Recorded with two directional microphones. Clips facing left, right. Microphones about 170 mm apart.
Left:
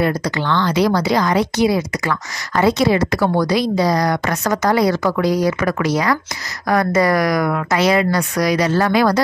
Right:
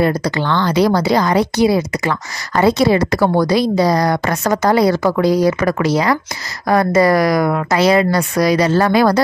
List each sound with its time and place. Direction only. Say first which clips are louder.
0.0 s a woman's voice: right 3 dB; 35° right (ahead or behind)